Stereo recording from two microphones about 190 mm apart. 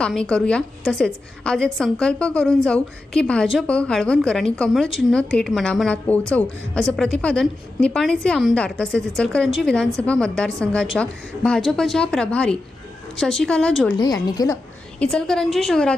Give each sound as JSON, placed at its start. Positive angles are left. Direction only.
{"t": 0.0, "sound": "a woman's voice", "side_deg": 5}
{"t": 14.0, "sound": "a woman's voice", "side_deg": 20}
{"t": 14.9, "sound": "a woman's voice", "side_deg": 5}